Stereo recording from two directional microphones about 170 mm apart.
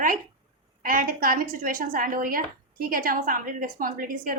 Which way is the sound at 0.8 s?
55° right (ahead or behind).